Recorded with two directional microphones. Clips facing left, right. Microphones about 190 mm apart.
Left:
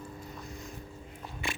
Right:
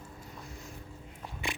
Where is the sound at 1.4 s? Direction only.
15° right (ahead or behind).